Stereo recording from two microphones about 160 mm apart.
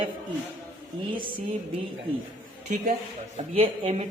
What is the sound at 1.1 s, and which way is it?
Speech, 30° right (ahead or behind).